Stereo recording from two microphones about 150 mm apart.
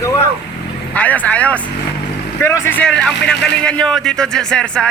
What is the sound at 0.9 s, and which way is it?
Speech, 10° left (ahead or behind).